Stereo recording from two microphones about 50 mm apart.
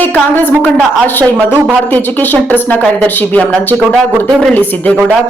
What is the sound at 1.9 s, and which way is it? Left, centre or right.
Speech, left.